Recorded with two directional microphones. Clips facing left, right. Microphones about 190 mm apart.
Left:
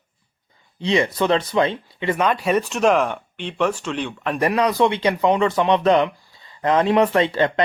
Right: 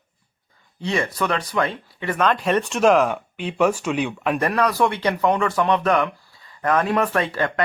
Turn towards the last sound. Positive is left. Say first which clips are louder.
# left 4 dB
turn(degrees=20)  # may be behind; listen again after turning